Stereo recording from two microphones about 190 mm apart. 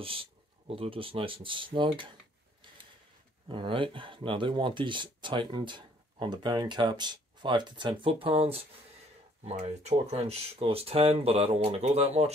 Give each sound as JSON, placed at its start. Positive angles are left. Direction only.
{"t": 0.0, "sound": "speech", "side_deg": -30}
{"t": 3.4, "sound": "speech", "side_deg": -25}